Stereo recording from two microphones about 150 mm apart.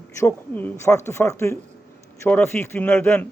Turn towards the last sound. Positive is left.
turn(degrees=10)  # may be behind; listen again after turning